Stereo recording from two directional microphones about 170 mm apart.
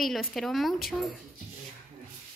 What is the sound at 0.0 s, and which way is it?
Speech, centre (ahead or behind).